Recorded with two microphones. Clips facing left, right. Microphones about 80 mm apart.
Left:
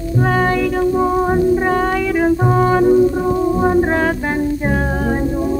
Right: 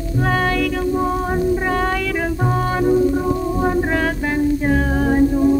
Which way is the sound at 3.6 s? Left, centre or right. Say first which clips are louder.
Left 3 dB; centre.